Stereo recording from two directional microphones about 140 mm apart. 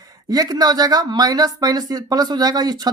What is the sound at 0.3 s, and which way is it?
Speech, 25° right (ahead or behind).